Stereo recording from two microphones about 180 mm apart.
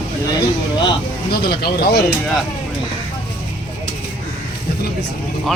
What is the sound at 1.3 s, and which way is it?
Speech, 60° left (ahead or behind).